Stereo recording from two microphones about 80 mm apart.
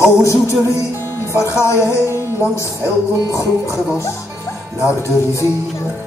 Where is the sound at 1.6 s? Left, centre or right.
Left.